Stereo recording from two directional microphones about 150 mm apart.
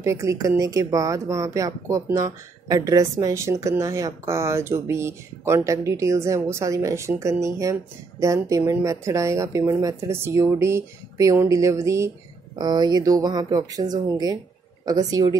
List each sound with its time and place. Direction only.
0.0 s speech: 20° right (ahead or behind)